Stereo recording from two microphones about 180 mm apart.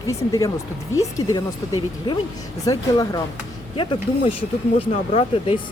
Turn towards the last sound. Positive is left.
turn(degrees=30)  # may be behind; listen again after turning